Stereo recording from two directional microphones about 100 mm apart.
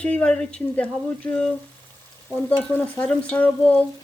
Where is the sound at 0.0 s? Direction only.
10° left (ahead or behind).